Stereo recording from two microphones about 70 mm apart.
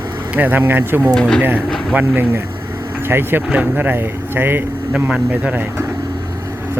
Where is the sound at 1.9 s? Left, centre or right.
Right.